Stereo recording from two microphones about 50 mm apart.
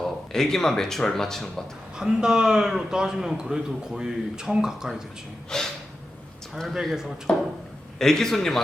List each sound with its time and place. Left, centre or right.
0.0 s speech: centre
2.0 s a man's voice: centre
5.5 s snort: centre
7.3 s a man's voice: centre